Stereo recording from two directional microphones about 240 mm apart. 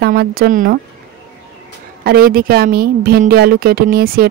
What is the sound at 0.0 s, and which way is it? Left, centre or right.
Speech, right.